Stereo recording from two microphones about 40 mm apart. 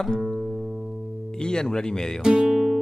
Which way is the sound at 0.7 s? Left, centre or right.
Centre.